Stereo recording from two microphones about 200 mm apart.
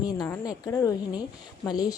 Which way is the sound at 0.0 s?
20° left (ahead or behind).